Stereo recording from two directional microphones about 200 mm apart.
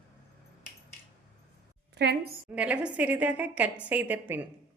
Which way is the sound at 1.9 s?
55° right (ahead or behind).